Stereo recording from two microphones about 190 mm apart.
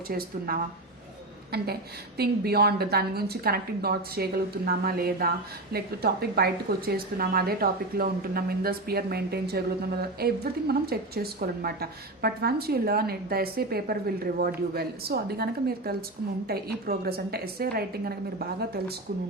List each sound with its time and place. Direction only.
0.1 s a woman's voice: 50° right (ahead or behind)